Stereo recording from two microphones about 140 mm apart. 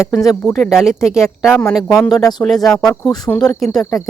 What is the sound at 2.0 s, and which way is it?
Speech, 30° left (ahead or behind).